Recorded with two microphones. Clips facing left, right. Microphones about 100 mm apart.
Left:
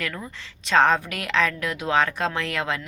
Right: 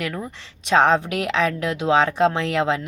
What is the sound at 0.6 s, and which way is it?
Speech, 20° right (ahead or behind).